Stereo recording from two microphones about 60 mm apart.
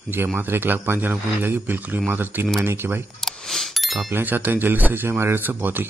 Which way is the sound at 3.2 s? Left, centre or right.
Centre.